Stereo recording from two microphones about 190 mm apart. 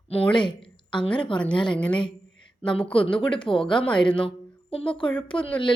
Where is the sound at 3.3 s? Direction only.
25° left (ahead or behind).